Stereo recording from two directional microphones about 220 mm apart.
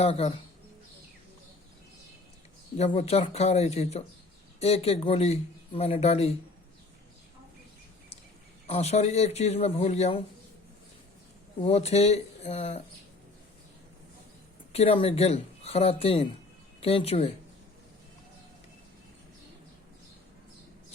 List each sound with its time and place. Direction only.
0.0 s a man's voice: 25° left (ahead or behind)
2.7 s a man's voice: 30° left (ahead or behind)
8.6 s a man's voice: 30° left (ahead or behind)
11.6 s a man's voice: 30° left (ahead or behind)
14.7 s a man's voice: 25° left (ahead or behind)